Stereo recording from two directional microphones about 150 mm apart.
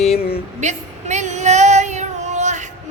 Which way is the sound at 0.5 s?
50° right (ahead or behind).